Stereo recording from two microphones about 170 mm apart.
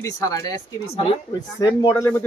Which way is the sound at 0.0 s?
20° left (ahead or behind).